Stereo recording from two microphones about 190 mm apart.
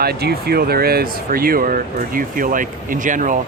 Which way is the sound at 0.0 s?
55° right (ahead or behind).